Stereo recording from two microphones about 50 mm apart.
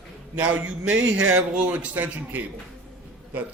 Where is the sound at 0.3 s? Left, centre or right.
Right.